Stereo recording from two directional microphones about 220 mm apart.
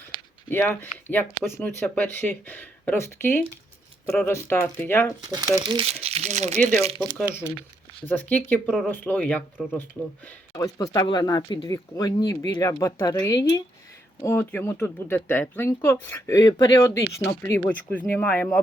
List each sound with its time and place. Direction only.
0.5 s speech: 10° left (ahead or behind)
5.3 s speech: 15° right (ahead or behind); by 6.7 s 30° right (ahead or behind)
8.0 s speech: 10° left (ahead or behind)
10.5 s speech: 15° left (ahead or behind)